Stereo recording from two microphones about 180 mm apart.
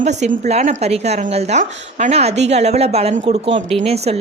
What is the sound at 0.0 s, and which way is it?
A woman's voice, 40° right (ahead or behind).